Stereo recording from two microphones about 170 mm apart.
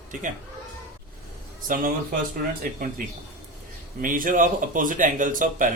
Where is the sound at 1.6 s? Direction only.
55° right (ahead or behind).